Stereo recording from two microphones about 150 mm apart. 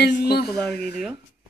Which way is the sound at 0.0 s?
90° left.